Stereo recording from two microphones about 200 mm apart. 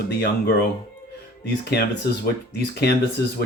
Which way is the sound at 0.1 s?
55° left (ahead or behind).